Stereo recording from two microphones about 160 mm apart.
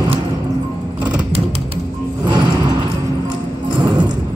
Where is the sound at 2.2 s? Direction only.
30° right (ahead or behind).